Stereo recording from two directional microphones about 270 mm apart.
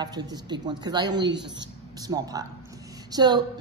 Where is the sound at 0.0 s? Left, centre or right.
Centre.